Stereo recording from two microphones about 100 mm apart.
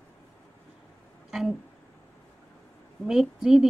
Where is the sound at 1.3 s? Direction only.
5° right (ahead or behind).